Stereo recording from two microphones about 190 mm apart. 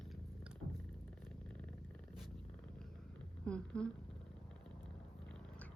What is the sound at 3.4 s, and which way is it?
Speech, 5° left (ahead or behind).